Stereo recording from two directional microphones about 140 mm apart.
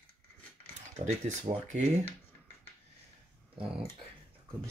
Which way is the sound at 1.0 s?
60° right (ahead or behind).